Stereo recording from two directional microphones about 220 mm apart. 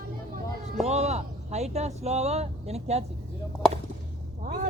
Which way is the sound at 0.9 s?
30° right (ahead or behind).